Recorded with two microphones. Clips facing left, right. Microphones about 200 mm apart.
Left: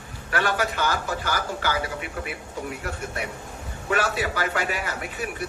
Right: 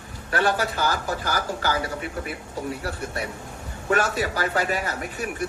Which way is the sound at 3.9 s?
45° right (ahead or behind).